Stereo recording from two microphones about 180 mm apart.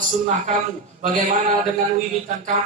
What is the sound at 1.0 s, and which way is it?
Speech, 50° right (ahead or behind).